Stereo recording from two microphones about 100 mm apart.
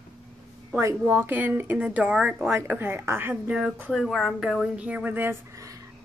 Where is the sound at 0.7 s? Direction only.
25° right (ahead or behind); by 2.5 s 5° right (ahead or behind).